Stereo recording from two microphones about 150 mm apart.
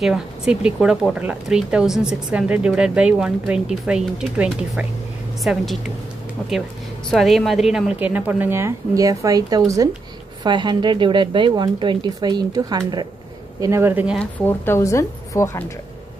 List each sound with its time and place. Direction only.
0.0 s a woman's voice: 5° right (ahead or behind)
7.1 s a woman's voice: centre (ahead or behind)
14.4 s a woman's voice: 15° left (ahead or behind)